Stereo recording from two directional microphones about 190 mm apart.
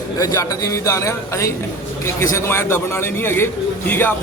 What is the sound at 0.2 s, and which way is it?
A man's voice, 20° left (ahead or behind).